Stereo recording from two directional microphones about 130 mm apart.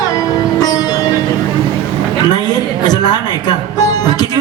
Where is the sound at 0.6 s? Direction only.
30° left (ahead or behind).